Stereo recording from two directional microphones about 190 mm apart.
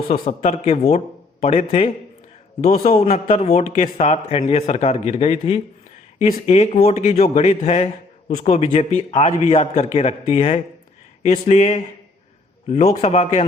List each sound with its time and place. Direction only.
0.1 s a man's voice: 35° left (ahead or behind)
2.8 s a man's voice: 35° left (ahead or behind)